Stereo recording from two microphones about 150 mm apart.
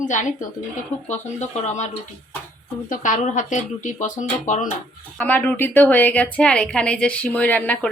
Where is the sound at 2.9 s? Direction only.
60° left (ahead or behind).